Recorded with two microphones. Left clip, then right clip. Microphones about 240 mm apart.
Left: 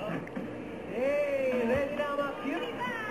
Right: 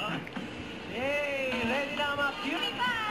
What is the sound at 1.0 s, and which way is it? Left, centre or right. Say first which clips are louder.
Music: left 2 dB; right.